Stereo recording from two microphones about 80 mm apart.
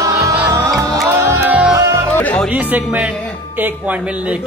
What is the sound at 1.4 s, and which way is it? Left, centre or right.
Music, centre.